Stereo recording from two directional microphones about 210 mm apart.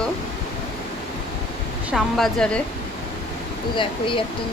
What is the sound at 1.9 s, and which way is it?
Speech, centre (ahead or behind).